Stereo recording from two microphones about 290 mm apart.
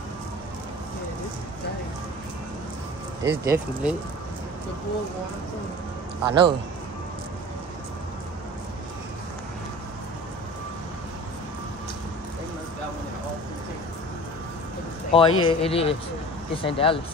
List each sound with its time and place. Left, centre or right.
3.3 s speech: centre
6.2 s speech: centre
15.1 s speech: centre